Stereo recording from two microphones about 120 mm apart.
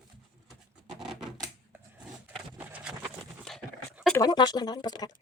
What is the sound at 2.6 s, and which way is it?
Horse, 10° right (ahead or behind).